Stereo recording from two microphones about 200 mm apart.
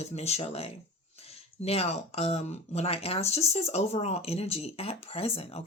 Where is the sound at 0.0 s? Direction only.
30° left (ahead or behind).